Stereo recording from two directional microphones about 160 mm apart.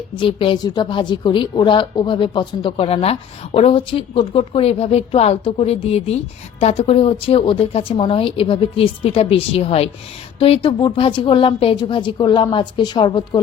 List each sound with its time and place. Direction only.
0.2 s a woman's voice: 35° left (ahead or behind)